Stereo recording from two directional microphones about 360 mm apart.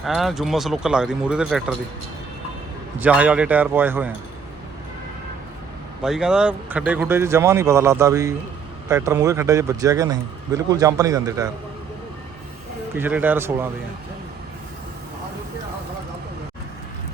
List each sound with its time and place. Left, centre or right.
0.0 s speech: centre
3.0 s speech: centre
6.0 s speech: centre
13.0 s speech: centre